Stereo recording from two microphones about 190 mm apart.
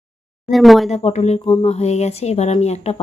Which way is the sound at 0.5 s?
Centre (ahead or behind).